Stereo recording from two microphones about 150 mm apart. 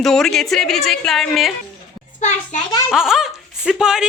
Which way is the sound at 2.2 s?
55° left (ahead or behind).